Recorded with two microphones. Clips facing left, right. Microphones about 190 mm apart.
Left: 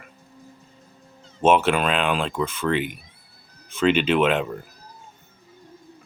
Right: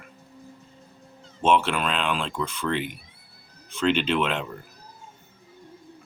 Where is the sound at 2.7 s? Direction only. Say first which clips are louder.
Left 3 dB; 10° left (ahead or behind).